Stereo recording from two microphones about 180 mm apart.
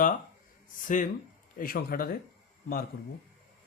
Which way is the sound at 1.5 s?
55° left (ahead or behind).